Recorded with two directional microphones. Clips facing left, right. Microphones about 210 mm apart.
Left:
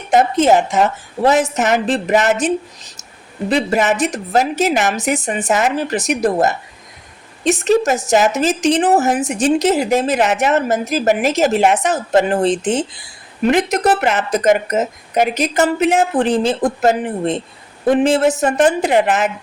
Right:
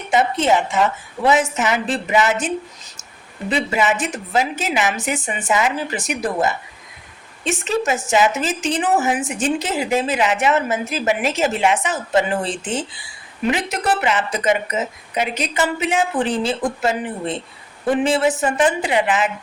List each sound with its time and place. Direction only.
0.1 s speech: 45° left (ahead or behind)
3.5 s a woman's voice: 40° left (ahead or behind)